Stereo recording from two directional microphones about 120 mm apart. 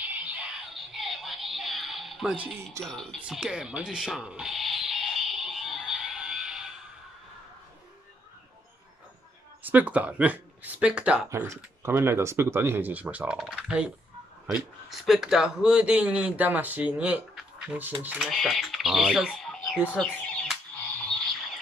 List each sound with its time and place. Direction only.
0.1 s music: 10° right (ahead or behind)
2.8 s speech: 5° left (ahead or behind)
3.2 s a sound: 5° right (ahead or behind)
9.6 s speech: 15° right (ahead or behind)
11.2 s speech: 25° right (ahead or behind); by 13.8 s 10° right (ahead or behind)
14.9 s speech: 5° right (ahead or behind)
20.0 s a sound: 5° left (ahead or behind)